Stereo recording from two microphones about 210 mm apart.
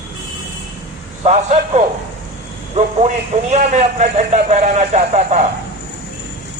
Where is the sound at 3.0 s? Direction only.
35° right (ahead or behind).